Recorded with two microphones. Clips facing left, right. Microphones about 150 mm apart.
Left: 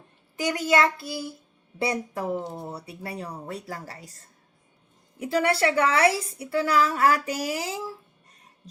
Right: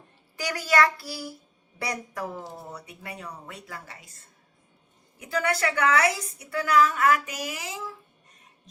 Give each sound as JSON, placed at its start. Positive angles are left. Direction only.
{"t": 0.3, "sound": "child singing", "side_deg": 20}
{"t": 2.5, "sound": "a woman's voice", "side_deg": 30}
{"t": 5.2, "sound": "a woman's voice", "side_deg": 30}